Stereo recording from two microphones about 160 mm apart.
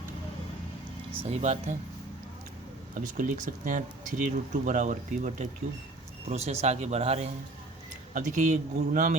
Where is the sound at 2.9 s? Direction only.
55° right (ahead or behind).